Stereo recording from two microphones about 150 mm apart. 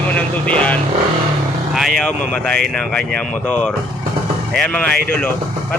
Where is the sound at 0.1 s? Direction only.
10° left (ahead or behind).